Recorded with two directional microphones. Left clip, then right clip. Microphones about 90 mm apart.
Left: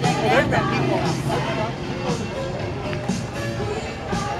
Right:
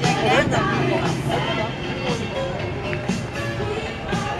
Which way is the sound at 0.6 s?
25° right (ahead or behind).